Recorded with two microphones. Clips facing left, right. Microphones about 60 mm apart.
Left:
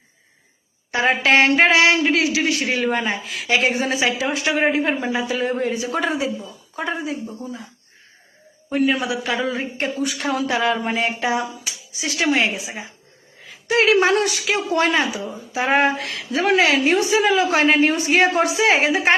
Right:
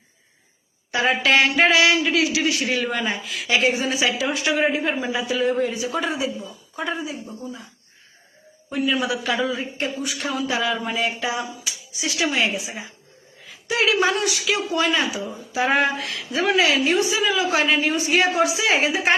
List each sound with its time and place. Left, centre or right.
0.9 s a woman's voice: left
5.1 s a woman's voice: left
6.0 s speech: left
9.0 s a woman's voice: left
9.5 s a woman's voice: left
12.5 s a woman's voice: left
13.5 s a sound: left
13.8 s speech: left
15.5 s a woman's voice: left
16.5 s speech: left
17.7 s a man's voice: left
17.9 s a woman's voice: left